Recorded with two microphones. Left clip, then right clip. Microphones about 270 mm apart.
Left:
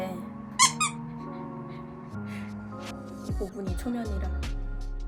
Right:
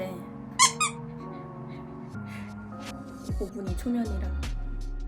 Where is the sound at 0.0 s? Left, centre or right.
Centre.